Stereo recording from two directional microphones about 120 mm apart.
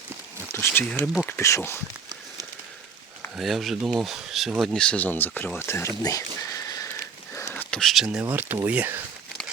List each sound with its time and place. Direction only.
0.5 s speech: 20° left (ahead or behind)
3.3 s speech: centre (ahead or behind); by 5.9 s 20° left (ahead or behind)
6.0 s a sound: 30° left (ahead or behind)
7.5 s speech: 10° left (ahead or behind)
8.2 s speech: 15° right (ahead or behind)